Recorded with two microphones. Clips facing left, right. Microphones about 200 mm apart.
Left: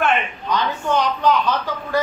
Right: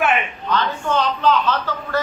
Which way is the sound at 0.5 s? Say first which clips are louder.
Even; 15° left (ahead or behind).